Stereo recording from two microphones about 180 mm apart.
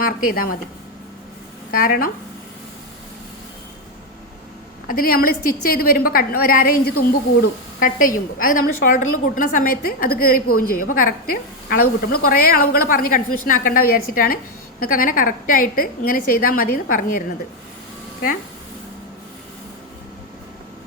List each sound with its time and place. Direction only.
0.0 s a woman's voice: 55° left (ahead or behind)
1.8 s a woman's voice: 50° left (ahead or behind)
4.9 s a woman's voice: 55° left (ahead or behind)
7.8 s a woman's voice: 50° left (ahead or behind)